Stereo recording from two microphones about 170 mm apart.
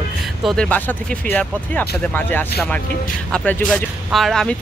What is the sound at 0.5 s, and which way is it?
A woman's voice, 5° left (ahead or behind).